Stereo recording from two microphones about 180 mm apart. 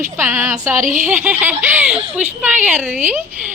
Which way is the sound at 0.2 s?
15° right (ahead or behind).